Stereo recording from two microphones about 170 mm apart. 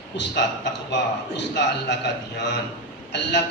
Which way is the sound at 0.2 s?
90° left.